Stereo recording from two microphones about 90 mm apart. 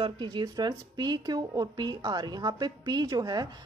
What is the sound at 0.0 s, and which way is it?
Speech, 55° right (ahead or behind).